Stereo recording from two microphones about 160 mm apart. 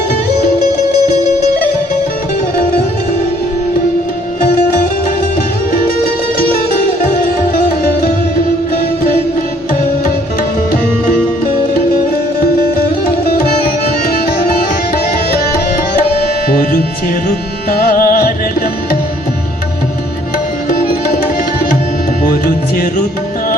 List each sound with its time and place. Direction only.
16.5 s music: 65° left (ahead or behind)
17.9 s music: 60° left (ahead or behind)
22.2 s music: 60° left (ahead or behind)